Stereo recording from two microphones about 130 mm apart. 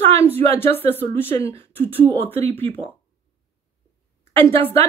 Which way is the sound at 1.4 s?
50° right (ahead or behind).